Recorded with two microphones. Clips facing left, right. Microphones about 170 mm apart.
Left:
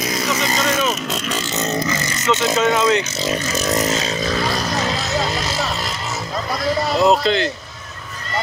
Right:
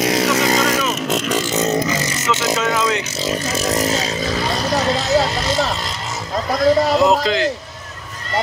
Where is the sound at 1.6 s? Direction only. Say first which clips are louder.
Right 2 dB; 15° right (ahead or behind).